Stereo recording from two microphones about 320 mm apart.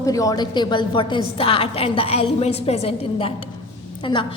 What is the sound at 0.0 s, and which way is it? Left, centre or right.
A woman's voice, centre.